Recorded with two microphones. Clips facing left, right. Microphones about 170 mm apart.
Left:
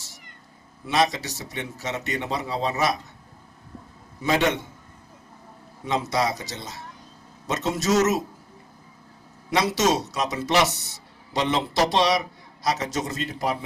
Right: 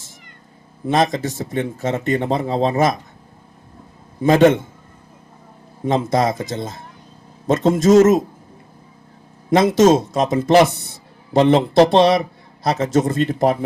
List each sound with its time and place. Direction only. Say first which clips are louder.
0.9 s a man's voice: right 5 dB; 50° right (ahead or behind)
4.2 s a man's voice: right 10 dB; 50° right (ahead or behind)
5.8 s a man's voice: right 7 dB; 50° right (ahead or behind)
9.5 s a man's voice: right 9 dB; 50° right (ahead or behind)